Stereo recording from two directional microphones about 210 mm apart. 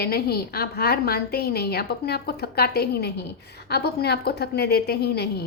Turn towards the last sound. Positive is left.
turn(degrees=50)  # may be behind; listen again after turning